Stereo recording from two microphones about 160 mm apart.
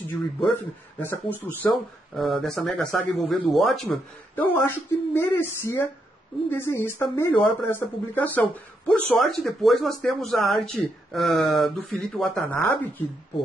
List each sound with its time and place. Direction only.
0.5 s speech: 10° left (ahead or behind)
2.1 s speech: centre (ahead or behind)